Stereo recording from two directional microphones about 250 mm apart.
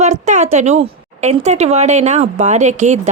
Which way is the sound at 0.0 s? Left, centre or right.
Right.